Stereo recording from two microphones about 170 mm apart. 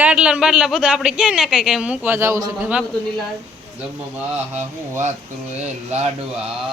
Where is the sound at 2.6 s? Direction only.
5° right (ahead or behind).